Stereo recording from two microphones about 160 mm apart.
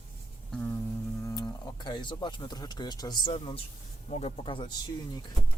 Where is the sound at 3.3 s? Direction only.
35° left (ahead or behind).